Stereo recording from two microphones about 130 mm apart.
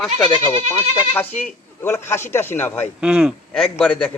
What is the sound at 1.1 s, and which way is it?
A man's voice, 15° left (ahead or behind).